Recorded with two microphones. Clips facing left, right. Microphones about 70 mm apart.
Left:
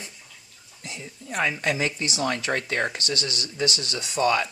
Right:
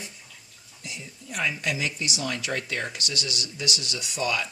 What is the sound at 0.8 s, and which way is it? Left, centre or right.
Speech, left.